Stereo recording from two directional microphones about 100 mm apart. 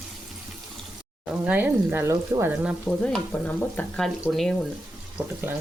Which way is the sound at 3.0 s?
15° left (ahead or behind).